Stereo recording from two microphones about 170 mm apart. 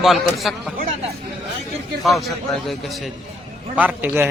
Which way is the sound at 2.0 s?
Centre (ahead or behind).